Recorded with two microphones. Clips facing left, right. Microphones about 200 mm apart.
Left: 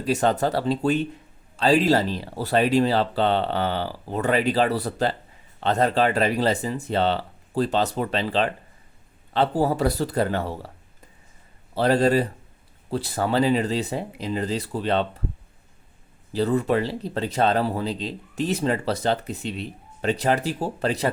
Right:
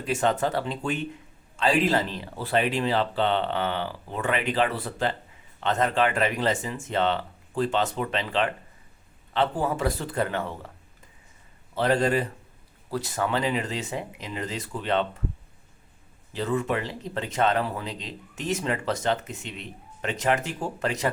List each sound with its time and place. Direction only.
0.0 s speech: 35° left (ahead or behind)
11.7 s speech: 35° left (ahead or behind)
16.3 s speech: 35° left (ahead or behind)